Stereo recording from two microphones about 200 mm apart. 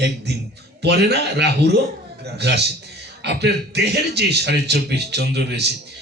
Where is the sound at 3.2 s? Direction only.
55° right (ahead or behind).